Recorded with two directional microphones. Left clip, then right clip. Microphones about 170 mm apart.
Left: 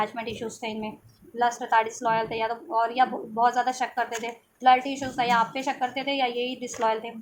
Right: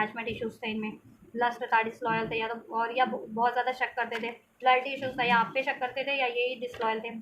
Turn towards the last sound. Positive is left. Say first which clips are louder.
# left 5 dB
turn(degrees=45)  # may be behind; listen again after turning